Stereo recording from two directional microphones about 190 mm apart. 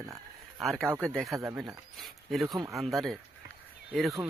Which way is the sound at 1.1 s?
Centre (ahead or behind).